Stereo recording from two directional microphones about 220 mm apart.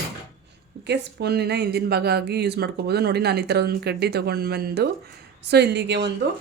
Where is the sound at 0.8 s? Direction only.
50° right (ahead or behind).